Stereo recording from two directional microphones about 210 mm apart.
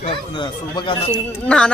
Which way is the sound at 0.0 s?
25° left (ahead or behind).